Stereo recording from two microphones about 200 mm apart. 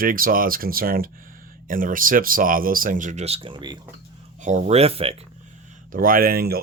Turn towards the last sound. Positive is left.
turn(degrees=-50)  # may be behind; listen again after turning